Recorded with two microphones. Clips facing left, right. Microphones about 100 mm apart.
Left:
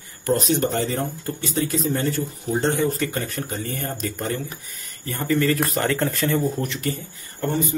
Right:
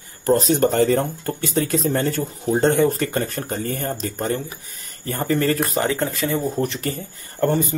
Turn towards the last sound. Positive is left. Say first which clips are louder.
# right 5 dB
turn(degrees=-55)  # may be behind; listen again after turning